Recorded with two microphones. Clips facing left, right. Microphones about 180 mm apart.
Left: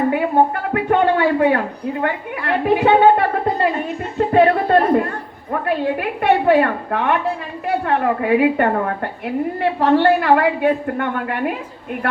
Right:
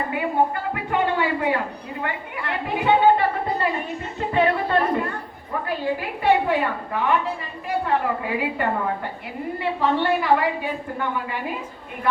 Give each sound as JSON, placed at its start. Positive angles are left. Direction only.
{"t": 0.1, "sound": "a man's voice", "side_deg": 70}
{"t": 4.3, "sound": "a woman's voice", "side_deg": 50}